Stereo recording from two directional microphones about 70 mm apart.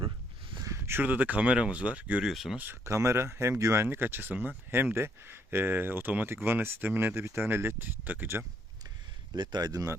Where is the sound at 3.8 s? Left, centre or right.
Right.